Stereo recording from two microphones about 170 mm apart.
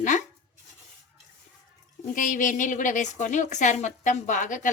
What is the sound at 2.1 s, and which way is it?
A woman's voice, 50° left (ahead or behind).